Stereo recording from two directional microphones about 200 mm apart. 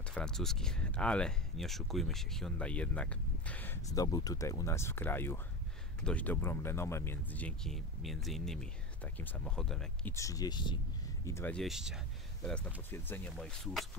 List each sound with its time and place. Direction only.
0.1 s speech: 5° left (ahead or behind)
10.1 s speech: 15° left (ahead or behind)
11.2 s speech: 10° left (ahead or behind)
11.6 s speech: centre (ahead or behind)
12.9 s speech: 10° left (ahead or behind)